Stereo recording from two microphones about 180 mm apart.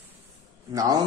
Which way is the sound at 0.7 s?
20° right (ahead or behind).